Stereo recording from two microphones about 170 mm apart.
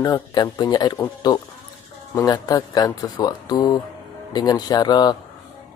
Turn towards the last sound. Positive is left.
turn(degrees=25)  # may be behind; listen again after turning